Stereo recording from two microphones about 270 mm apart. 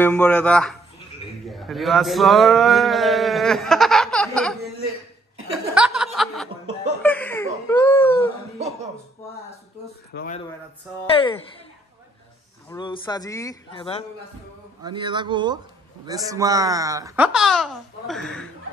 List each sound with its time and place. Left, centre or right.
0.0 s a man's voice: centre
5.5 s chuckle: centre
7.0 s laughter: centre
7.6 s a sound: centre
10.1 s speech: left
11.1 s speech: centre
12.6 s speech: centre
14.8 s speech: centre